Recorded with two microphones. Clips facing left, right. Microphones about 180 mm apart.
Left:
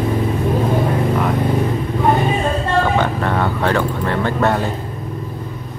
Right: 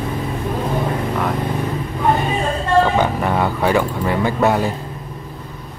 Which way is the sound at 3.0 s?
10° right (ahead or behind).